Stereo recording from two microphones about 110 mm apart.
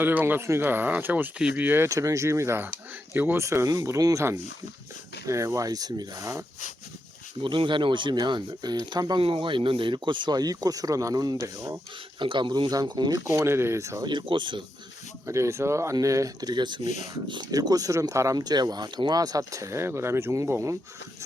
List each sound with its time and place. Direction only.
0.0 s speech: 15° right (ahead or behind)
7.4 s speech: 50° right (ahead or behind)
9.2 s speech: 55° right (ahead or behind); by 11.8 s 35° right (ahead or behind)
12.2 s speech: 45° right (ahead or behind); by 14.0 s 25° right (ahead or behind)
14.0 s speech: 45° right (ahead or behind)
15.3 s speech: 25° right (ahead or behind)